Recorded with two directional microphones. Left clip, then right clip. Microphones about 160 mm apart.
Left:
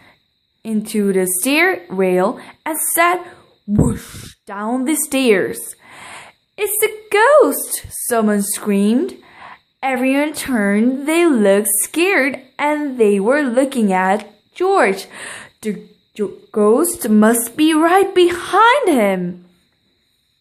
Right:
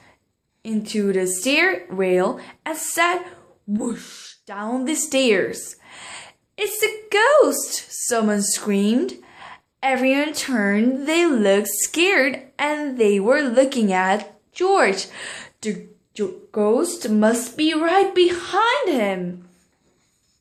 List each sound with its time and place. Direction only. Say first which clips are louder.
0.6 s speech: left 4 dB; 20° left (ahead or behind)